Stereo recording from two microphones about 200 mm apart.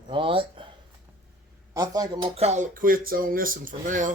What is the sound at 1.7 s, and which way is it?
Speech, 20° right (ahead or behind).